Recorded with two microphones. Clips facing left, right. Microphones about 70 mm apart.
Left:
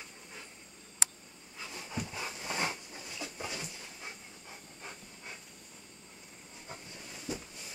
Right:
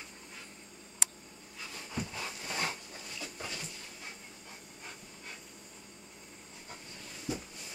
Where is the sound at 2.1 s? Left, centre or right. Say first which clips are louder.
Left 1 dB; centre.